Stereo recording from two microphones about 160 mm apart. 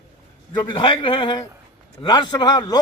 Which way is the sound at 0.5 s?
25° left (ahead or behind).